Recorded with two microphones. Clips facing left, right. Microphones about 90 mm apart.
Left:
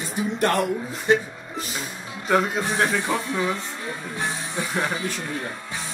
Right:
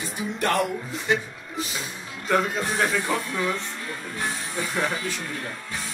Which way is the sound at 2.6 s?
15° left (ahead or behind).